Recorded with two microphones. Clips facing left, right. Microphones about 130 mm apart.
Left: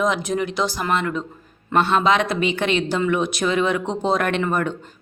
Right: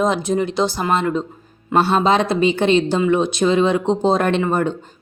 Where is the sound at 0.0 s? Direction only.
30° right (ahead or behind).